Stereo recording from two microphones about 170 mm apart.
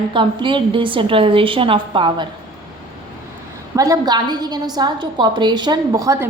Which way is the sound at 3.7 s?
20° right (ahead or behind).